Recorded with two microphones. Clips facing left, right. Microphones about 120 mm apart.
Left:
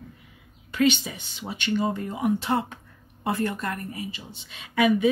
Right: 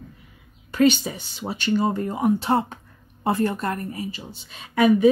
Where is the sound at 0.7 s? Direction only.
40° right (ahead or behind).